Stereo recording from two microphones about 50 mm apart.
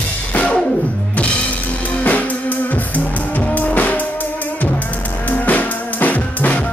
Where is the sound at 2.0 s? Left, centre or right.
Left.